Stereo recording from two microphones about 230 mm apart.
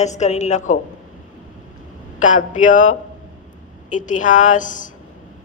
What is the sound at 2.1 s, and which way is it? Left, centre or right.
Speech, left.